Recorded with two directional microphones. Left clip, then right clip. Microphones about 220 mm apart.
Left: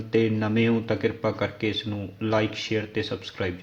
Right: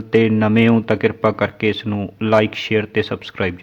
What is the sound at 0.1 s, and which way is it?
Speech, 35° right (ahead or behind).